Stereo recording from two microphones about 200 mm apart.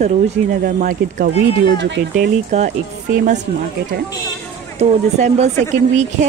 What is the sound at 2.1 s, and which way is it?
Speech, 40° right (ahead or behind).